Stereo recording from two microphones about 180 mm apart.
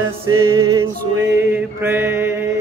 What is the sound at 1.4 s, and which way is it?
Mantra, 10° right (ahead or behind).